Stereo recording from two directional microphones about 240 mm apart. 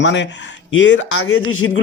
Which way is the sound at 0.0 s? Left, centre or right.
Left.